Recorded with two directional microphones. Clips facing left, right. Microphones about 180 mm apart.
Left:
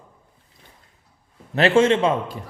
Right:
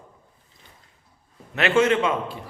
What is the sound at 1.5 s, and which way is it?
Speech, 30° left (ahead or behind).